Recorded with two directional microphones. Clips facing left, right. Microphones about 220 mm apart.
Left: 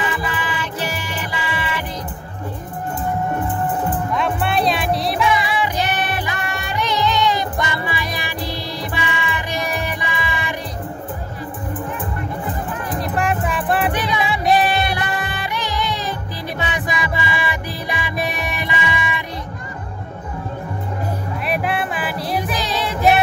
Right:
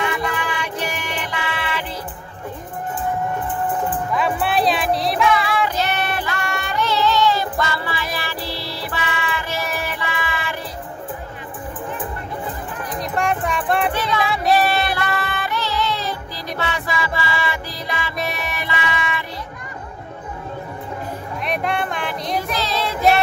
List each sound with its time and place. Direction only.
0.0 s music: 5° left (ahead or behind)
4.1 s music: 5° right (ahead or behind)
5.8 s music: 15° left (ahead or behind)
6.4 s music: centre (ahead or behind)
6.8 s music: 15° left (ahead or behind)
13.0 s music: centre (ahead or behind)
14.5 s music: 15° left (ahead or behind)
21.5 s music: 5° left (ahead or behind)